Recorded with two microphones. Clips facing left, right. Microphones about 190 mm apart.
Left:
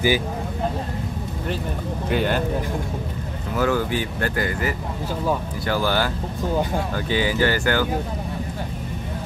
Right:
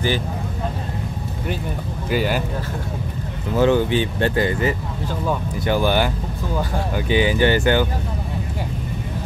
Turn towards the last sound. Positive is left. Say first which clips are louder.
# right 3 dB
turn(degrees=-20)  # may be behind; listen again after turning